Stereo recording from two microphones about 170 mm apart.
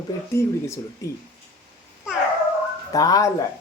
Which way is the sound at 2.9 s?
20° left (ahead or behind).